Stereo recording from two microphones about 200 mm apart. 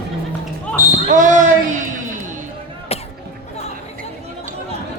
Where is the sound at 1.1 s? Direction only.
40° right (ahead or behind).